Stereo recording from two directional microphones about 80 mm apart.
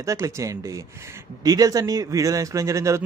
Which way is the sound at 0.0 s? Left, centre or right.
Right.